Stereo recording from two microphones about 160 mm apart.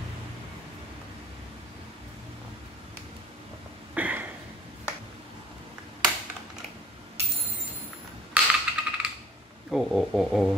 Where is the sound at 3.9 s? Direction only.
10° right (ahead or behind).